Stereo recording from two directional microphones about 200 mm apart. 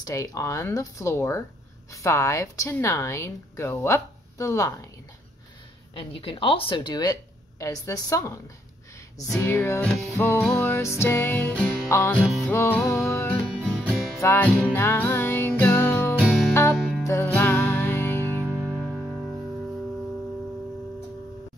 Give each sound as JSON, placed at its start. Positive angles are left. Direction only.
{"t": 0.0, "sound": "speech", "side_deg": 15}
{"t": 5.9, "sound": "speech", "side_deg": 25}
{"t": 9.4, "sound": "speech", "side_deg": 15}
{"t": 11.9, "sound": "music", "side_deg": 10}
{"t": 14.2, "sound": "music", "side_deg": 10}
{"t": 17.0, "sound": "music", "side_deg": 15}
{"t": 18.4, "sound": "music", "side_deg": -10}